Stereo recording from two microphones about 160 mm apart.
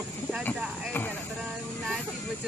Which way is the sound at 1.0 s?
15° left (ahead or behind).